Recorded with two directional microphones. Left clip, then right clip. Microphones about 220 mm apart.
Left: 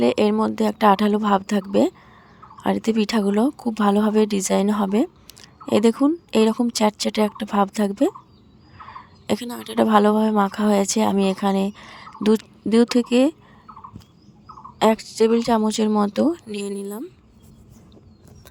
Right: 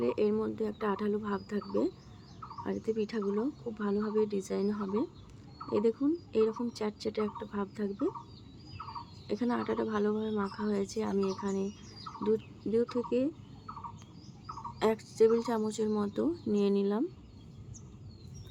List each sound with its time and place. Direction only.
0.0 s speech: 50° left (ahead or behind)
9.4 s a woman's voice: centre (ahead or behind)
9.7 s speech: 50° left (ahead or behind)
14.8 s speech: 45° left (ahead or behind)
16.6 s a woman's voice: centre (ahead or behind)